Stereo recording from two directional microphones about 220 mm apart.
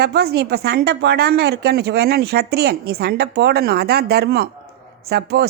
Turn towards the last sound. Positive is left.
turn(degrees=-45)  # may be behind; listen again after turning